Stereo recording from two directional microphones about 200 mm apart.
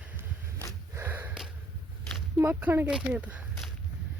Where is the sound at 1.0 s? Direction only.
10° right (ahead or behind).